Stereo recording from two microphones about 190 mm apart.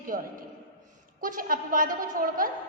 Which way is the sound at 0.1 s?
45° right (ahead or behind).